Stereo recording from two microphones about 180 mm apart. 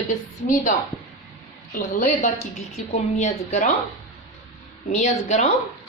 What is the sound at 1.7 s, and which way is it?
A woman's voice, 45° left (ahead or behind).